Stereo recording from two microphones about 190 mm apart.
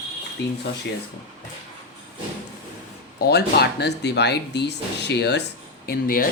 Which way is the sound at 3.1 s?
60° left (ahead or behind).